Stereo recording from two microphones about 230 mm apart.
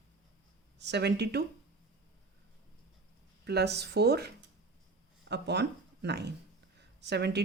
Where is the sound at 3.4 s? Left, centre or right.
Right.